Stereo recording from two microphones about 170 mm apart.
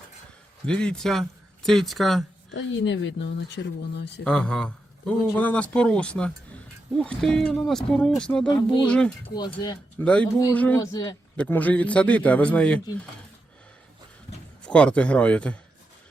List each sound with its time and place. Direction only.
0.6 s speech: 5° left (ahead or behind)
2.5 s speech: 90° left
4.2 s a man's voice: 5° left (ahead or behind)
8.4 s speech: 25° left (ahead or behind)
8.9 s speech: 5° left (ahead or behind)
9.3 s speech: 25° left (ahead or behind)
10.0 s a man's voice: 5° left (ahead or behind)
10.8 s speech: 20° left (ahead or behind)
11.3 s a man's voice: 10° left (ahead or behind)
14.6 s a man's voice: 5° left (ahead or behind)